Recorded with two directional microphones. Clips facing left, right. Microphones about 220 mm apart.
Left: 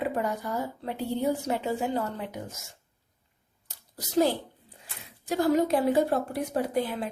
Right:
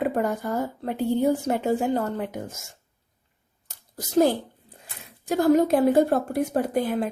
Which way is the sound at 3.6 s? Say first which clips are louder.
Right 5 dB; 50° right (ahead or behind).